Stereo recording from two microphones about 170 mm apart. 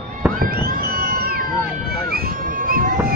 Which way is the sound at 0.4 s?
60° right (ahead or behind).